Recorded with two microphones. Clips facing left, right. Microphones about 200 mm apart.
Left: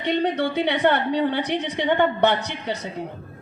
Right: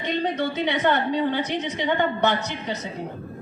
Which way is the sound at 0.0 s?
65° left (ahead or behind).